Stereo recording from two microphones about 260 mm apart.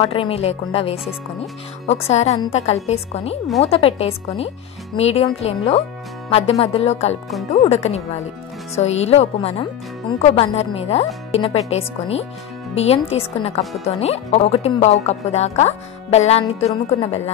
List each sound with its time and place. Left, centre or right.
0.0 s a woman's voice: left